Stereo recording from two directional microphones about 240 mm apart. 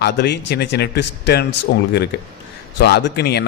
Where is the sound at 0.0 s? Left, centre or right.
Left.